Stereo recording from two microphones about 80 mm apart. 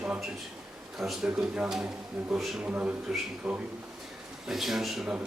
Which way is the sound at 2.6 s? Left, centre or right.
Centre.